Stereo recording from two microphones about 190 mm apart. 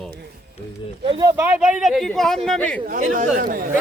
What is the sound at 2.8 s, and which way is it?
Speech, 45° right (ahead or behind).